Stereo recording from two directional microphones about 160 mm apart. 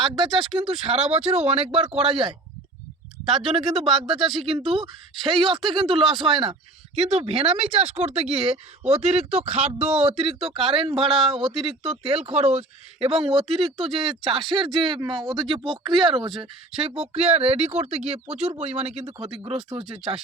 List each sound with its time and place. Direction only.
0.0 s speech: 30° right (ahead or behind)
3.5 s speech: 35° right (ahead or behind)